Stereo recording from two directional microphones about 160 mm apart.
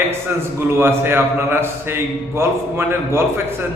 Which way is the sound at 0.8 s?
15° right (ahead or behind).